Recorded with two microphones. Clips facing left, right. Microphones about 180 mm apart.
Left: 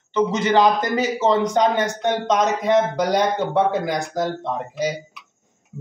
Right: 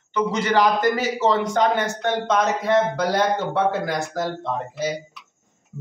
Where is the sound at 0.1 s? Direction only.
20° left (ahead or behind).